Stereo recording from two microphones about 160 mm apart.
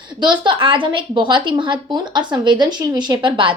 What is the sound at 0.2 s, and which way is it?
A woman's voice, 30° right (ahead or behind).